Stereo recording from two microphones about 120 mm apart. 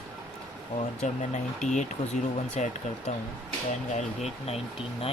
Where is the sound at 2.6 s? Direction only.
70° left (ahead or behind).